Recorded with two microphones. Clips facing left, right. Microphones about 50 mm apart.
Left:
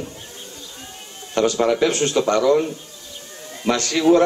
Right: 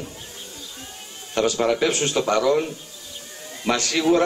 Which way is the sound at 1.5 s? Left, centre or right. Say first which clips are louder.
Left 2 dB; centre.